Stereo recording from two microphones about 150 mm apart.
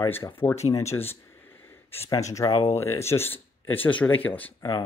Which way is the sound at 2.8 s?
15° left (ahead or behind).